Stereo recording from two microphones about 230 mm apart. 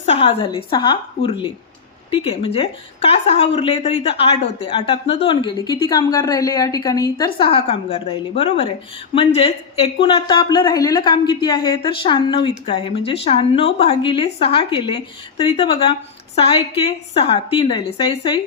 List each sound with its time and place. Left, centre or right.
0.0 s a woman's voice: left
2.0 s a woman's voice: left